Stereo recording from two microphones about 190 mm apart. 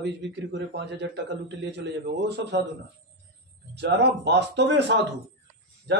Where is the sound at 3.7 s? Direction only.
65° right (ahead or behind).